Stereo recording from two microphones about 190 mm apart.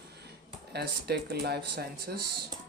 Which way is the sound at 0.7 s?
60° right (ahead or behind).